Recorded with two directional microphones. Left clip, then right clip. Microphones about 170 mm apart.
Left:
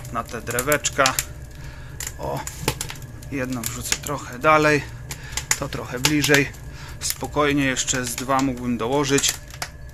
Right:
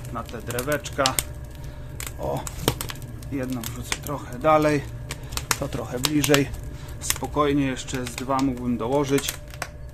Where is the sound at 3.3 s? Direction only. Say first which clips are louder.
Left 3 dB; centre (ahead or behind).